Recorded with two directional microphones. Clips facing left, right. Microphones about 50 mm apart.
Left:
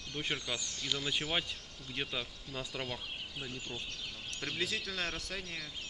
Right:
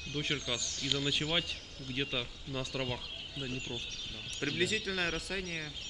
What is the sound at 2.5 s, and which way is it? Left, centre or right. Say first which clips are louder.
Speech: right 3 dB; centre.